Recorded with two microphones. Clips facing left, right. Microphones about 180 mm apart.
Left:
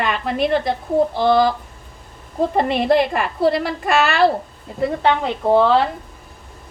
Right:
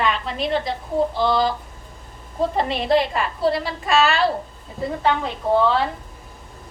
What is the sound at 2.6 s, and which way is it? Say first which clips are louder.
A woman's voice: left 4 dB; 55° left (ahead or behind).